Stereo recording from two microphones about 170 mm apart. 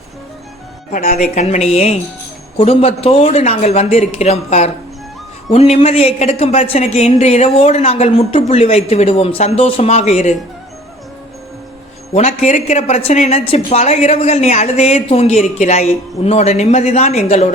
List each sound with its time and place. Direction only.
0.9 s a woman's voice: 50° left (ahead or behind)
12.1 s a woman's voice: 40° left (ahead or behind)